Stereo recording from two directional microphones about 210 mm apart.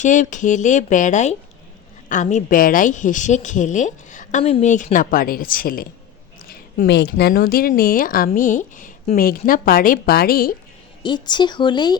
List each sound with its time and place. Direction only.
0.0 s a woman's voice: 35° left (ahead or behind)
11.0 s speech: 20° left (ahead or behind)